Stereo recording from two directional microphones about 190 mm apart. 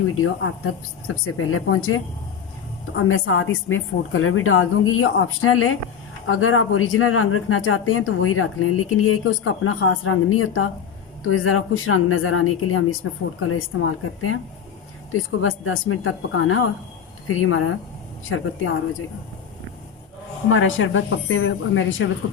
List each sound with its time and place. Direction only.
0.2 s a woman's voice: 90° left
20.5 s a woman's voice: 90° left